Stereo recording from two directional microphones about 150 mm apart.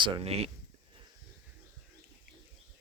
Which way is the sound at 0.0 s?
40° right (ahead or behind).